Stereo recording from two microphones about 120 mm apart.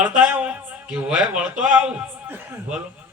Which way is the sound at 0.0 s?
15° right (ahead or behind).